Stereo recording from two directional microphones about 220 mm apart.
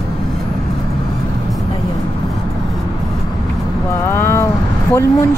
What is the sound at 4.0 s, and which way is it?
Vehicle, 10° left (ahead or behind).